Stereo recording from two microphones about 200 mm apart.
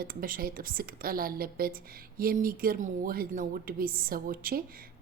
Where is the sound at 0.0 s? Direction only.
45° right (ahead or behind).